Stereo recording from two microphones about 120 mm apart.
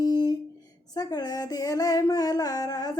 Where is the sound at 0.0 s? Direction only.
35° left (ahead or behind).